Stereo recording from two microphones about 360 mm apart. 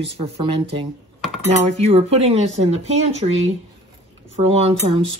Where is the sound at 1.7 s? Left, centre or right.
Centre.